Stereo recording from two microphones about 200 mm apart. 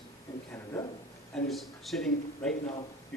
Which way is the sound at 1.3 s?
Centre (ahead or behind).